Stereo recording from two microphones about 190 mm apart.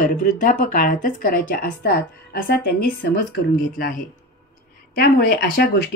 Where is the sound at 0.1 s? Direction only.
45° left (ahead or behind).